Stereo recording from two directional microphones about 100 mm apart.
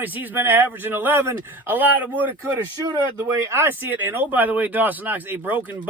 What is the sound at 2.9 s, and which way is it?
Speech, 30° right (ahead or behind).